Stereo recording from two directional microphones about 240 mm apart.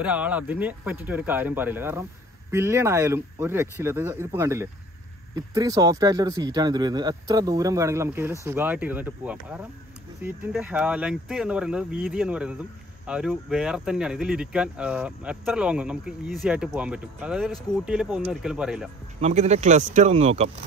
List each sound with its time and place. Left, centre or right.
0.0 s speech: centre
19.2 s speech: right